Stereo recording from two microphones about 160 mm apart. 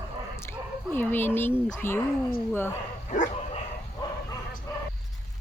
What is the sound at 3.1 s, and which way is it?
Dog, 45° left (ahead or behind).